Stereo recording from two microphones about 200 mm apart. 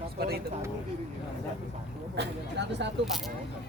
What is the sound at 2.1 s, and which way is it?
Speech, 60° right (ahead or behind).